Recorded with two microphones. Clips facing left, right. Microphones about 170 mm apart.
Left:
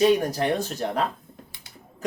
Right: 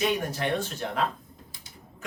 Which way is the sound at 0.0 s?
35° left (ahead or behind).